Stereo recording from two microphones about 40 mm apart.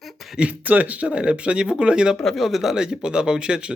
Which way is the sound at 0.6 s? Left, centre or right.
Right.